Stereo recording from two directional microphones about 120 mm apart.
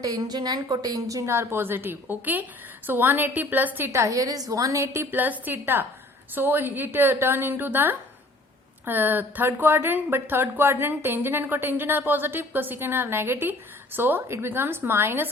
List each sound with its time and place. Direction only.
0.0 s a woman's voice: 30° right (ahead or behind)